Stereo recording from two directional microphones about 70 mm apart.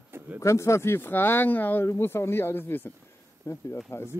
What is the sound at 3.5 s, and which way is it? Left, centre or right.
Speech, left.